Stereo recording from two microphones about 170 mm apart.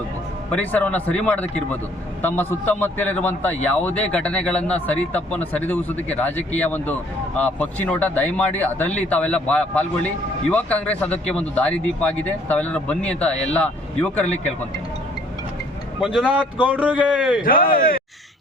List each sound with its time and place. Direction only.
0.5 s a man's voice: 10° left (ahead or behind)
16.0 s a man's voice: 5° right (ahead or behind)
17.4 s speech: 55° left (ahead or behind)